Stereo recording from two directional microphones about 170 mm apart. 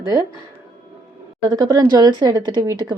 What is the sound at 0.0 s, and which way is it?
Speech, 20° right (ahead or behind).